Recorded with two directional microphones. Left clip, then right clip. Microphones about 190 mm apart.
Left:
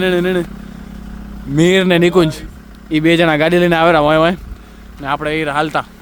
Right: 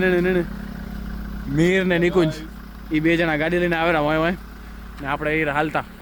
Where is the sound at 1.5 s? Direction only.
25° left (ahead or behind).